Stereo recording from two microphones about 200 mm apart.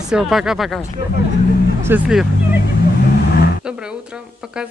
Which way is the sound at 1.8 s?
5° right (ahead or behind).